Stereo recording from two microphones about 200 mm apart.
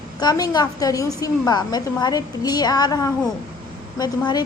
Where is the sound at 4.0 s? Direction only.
20° left (ahead or behind).